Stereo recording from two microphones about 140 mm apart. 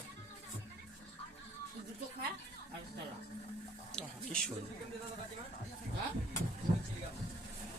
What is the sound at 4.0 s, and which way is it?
Speech, 5° left (ahead or behind).